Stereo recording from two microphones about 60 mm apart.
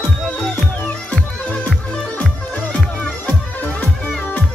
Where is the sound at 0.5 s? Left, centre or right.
Left.